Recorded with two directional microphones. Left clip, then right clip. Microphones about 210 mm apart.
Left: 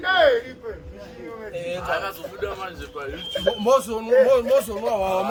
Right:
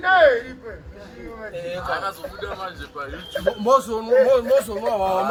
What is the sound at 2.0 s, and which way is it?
Speech, 40° left (ahead or behind).